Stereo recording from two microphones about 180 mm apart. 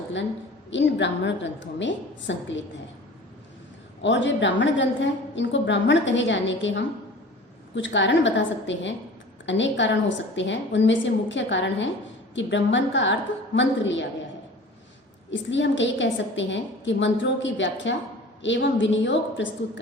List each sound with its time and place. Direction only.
0.7 s a woman's voice: 90° left
4.0 s a woman's voice: 90° left
15.3 s a woman's voice: 90° left